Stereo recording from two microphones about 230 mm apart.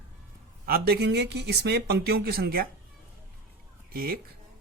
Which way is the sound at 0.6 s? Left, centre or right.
Right.